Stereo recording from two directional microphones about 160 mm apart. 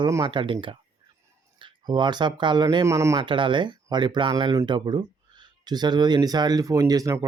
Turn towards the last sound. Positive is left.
turn(degrees=-20)  # may be behind; listen again after turning